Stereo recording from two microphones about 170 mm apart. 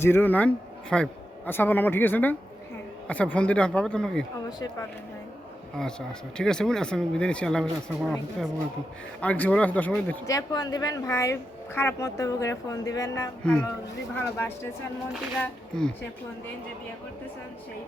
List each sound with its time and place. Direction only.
0.0 s a man's voice: 10° left (ahead or behind)
4.4 s speech: 25° left (ahead or behind)
5.8 s speech: 5° left (ahead or behind)
9.2 s a man's voice: 5° left (ahead or behind)
10.3 s speech: 25° left (ahead or behind)
13.4 s a man's voice: 5° left (ahead or behind)
15.4 s speech: 5° left (ahead or behind)